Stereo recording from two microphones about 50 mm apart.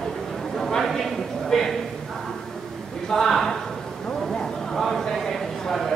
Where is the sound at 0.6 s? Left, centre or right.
Centre.